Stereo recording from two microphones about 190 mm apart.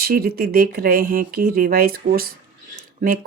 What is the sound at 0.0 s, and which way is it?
Speech, 50° right (ahead or behind).